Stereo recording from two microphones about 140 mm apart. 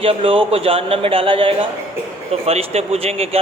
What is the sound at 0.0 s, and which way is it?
A man's voice, 40° right (ahead or behind).